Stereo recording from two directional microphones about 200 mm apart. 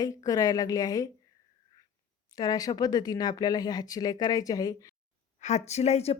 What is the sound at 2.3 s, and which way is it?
A woman's voice, 20° left (ahead or behind).